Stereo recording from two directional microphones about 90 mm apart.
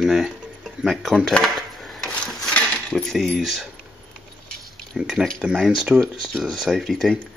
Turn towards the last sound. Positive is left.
turn(degrees=0)  # may be behind; listen again after turning